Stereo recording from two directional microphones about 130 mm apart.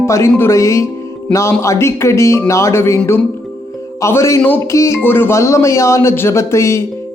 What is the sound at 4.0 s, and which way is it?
A man's voice, 20° left (ahead or behind).